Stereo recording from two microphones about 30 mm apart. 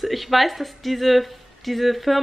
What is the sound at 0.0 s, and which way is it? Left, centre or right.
Speech, centre.